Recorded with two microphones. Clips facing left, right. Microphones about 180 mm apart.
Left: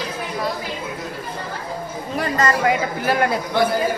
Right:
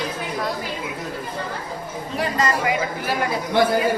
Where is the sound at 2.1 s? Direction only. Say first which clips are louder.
Left 2 dB; 50° left (ahead or behind).